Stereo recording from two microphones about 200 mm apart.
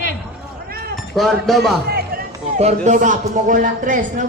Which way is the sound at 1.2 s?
Centre (ahead or behind).